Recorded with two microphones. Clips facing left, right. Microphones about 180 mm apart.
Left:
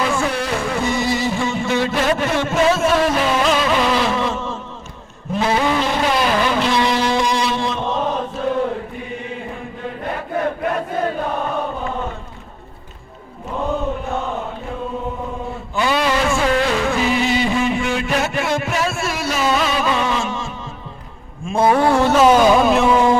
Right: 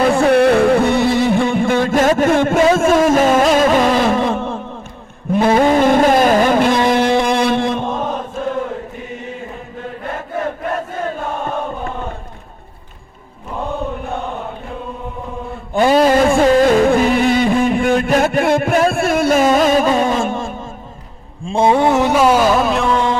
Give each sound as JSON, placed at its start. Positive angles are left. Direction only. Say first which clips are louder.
{"t": 0.0, "sound": "music", "louder": "right 9 dB", "side_deg": -60}
{"t": 5.4, "sound": "vehicle", "louder": "right 6 dB", "side_deg": -50}
{"t": 15.7, "sound": "music", "louder": "right 7 dB", "side_deg": -45}
{"t": 21.4, "sound": "a sound", "louder": "right 2 dB", "side_deg": -25}